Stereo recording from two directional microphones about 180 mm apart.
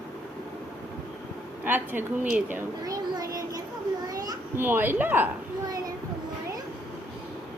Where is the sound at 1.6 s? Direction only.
10° right (ahead or behind).